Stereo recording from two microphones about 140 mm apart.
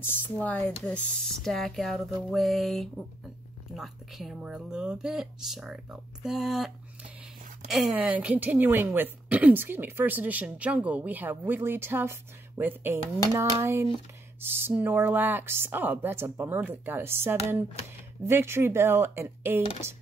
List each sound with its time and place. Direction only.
0.0 s a woman's voice: 15° left (ahead or behind); by 19.6 s 15° right (ahead or behind)